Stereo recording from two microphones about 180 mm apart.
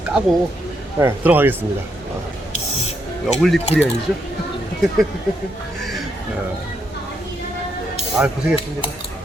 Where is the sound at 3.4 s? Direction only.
Centre (ahead or behind).